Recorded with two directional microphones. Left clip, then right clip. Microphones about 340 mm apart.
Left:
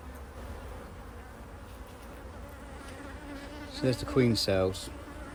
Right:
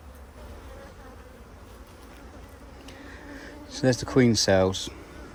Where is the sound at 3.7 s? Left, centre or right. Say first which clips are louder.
Right 6 dB; right.